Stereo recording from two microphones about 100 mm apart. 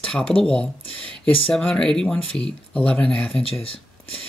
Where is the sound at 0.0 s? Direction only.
10° left (ahead or behind).